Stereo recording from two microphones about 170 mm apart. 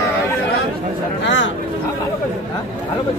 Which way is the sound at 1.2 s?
90° left.